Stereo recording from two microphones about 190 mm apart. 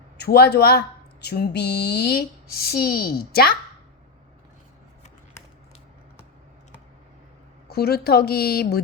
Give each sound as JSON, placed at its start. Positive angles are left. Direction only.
{"t": 0.2, "sound": "a woman's voice", "side_deg": 55}
{"t": 7.7, "sound": "speech", "side_deg": 55}